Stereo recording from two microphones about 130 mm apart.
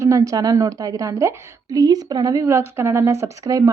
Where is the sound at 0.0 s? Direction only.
25° right (ahead or behind).